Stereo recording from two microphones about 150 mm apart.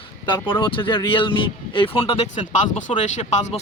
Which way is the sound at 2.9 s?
50° left (ahead or behind).